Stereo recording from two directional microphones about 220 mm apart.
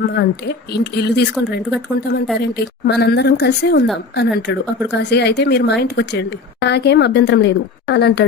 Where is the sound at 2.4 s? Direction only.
50° left (ahead or behind).